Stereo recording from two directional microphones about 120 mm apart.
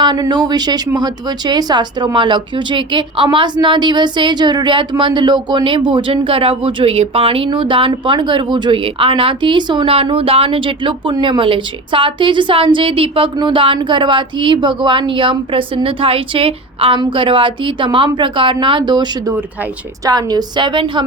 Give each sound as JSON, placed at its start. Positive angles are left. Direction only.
{"t": 0.0, "sound": "a woman's voice", "side_deg": -35}
{"t": 20.1, "sound": "speech", "side_deg": -35}